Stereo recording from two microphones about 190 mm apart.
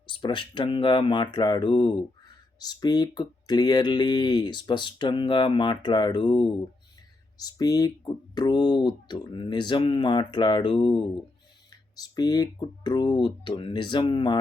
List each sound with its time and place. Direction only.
0.2 s speech: 25° left (ahead or behind)
11.9 s speech: 20° left (ahead or behind)